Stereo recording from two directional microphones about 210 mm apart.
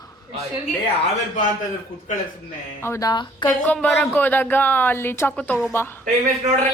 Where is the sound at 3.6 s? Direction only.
Centre (ahead or behind).